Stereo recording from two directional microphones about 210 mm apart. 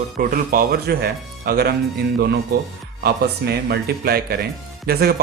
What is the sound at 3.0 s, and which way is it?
A man's voice, 50° right (ahead or behind).